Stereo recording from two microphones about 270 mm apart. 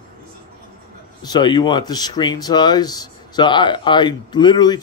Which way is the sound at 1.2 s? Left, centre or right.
Centre.